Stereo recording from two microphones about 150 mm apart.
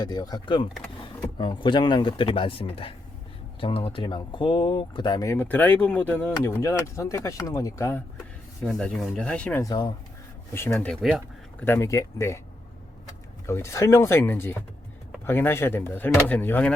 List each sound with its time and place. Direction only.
0.0 s speech: 25° left (ahead or behind); by 9.6 s 10° left (ahead or behind)
9.6 s speech: 25° left (ahead or behind)
13.5 s speech: 20° left (ahead or behind)